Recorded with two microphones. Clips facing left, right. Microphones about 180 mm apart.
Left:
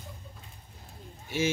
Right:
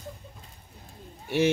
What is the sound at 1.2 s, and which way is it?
Speech, 65° right (ahead or behind).